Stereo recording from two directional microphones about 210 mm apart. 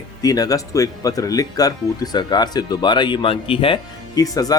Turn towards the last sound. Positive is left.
turn(degrees=15)  # may be behind; listen again after turning